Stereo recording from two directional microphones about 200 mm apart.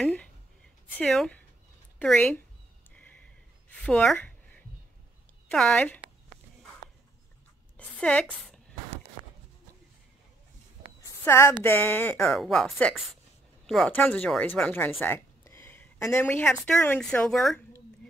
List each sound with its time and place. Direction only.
0.0 s a sound: 5° left (ahead or behind)
0.9 s speech: 5° left (ahead or behind)
3.7 s speech: 5° left (ahead or behind)
5.5 s speech: 5° left (ahead or behind)
7.7 s a woman's voice: 5° left (ahead or behind)
11.2 s speech: 15° left (ahead or behind)